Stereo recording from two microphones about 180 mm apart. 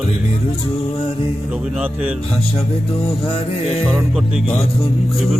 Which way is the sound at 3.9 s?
5° right (ahead or behind).